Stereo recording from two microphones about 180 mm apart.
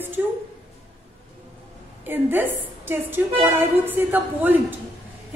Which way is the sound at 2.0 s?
10° right (ahead or behind).